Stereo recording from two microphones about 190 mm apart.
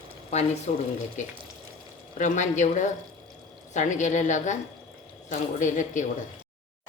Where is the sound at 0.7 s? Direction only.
35° left (ahead or behind).